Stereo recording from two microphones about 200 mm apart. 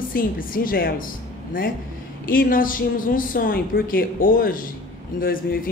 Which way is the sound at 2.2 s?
45° left (ahead or behind).